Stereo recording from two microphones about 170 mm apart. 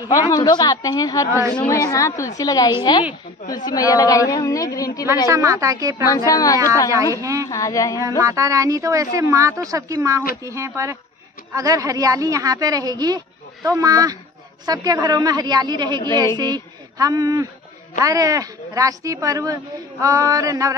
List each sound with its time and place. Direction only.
0.1 s a woman's voice: 20° left (ahead or behind)
5.0 s a woman's voice: 15° right (ahead or behind)
6.0 s a woman's voice: 20° left (ahead or behind)
7.2 s a woman's voice: 20° right (ahead or behind)
7.4 s a woman's voice: 20° left (ahead or behind)
8.2 s a woman's voice: 20° right (ahead or behind)